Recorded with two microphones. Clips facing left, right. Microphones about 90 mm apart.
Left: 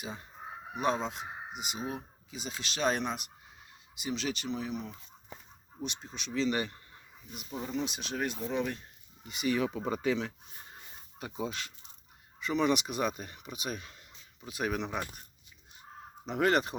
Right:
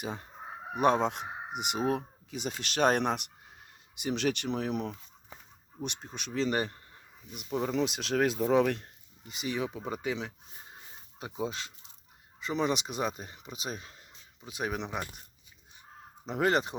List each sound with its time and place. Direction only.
0.0 s speech: 55° right (ahead or behind); by 4.9 s 75° right (ahead or behind)
5.8 s speech: 55° right (ahead or behind); by 6.8 s 35° right (ahead or behind)
7.3 s speech: 75° right (ahead or behind)
9.2 s speech: 25° right (ahead or behind)
9.7 s speech: 10° right (ahead or behind)
11.2 s speech: 25° right (ahead or behind)
16.2 s speech: 30° right (ahead or behind)